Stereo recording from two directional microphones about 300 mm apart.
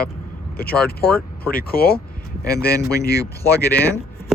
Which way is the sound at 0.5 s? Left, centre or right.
Left.